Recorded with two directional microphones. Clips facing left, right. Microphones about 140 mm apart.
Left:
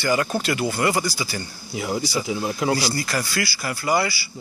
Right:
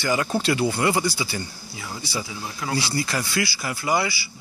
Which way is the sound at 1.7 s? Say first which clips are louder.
Left 8 dB; 20° left (ahead or behind).